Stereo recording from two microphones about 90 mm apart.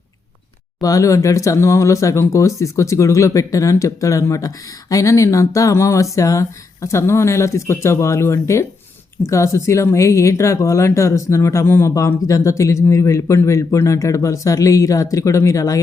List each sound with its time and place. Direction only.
0.8 s speech: 40° left (ahead or behind)